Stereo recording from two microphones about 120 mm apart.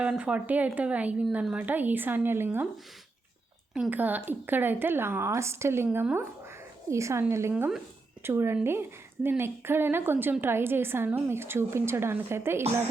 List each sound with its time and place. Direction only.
0.0 s speech: 10° right (ahead or behind)
3.8 s speech: 15° right (ahead or behind)